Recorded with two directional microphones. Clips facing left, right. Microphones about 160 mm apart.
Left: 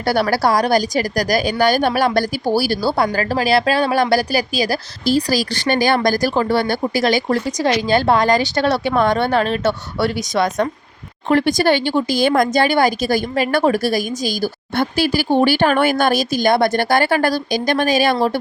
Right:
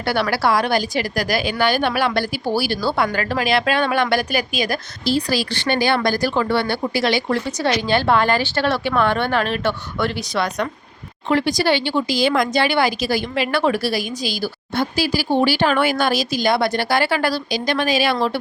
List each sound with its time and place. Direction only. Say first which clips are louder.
0.0 s speech: left 3 dB; 40° left (ahead or behind)